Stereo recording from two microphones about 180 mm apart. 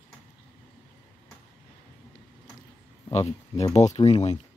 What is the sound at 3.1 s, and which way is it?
Speech, 35° left (ahead or behind).